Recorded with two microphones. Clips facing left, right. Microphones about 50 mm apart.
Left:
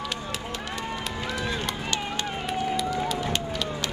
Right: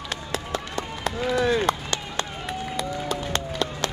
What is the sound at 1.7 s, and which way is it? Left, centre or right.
Run, right.